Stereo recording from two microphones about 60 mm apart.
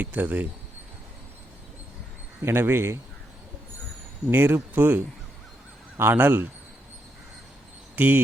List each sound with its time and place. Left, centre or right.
0.0 s speech: right
2.4 s speech: right
4.3 s speech: right
7.9 s speech: right